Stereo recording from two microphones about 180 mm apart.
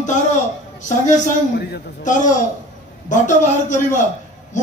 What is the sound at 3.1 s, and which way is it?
Speech, 45° left (ahead or behind).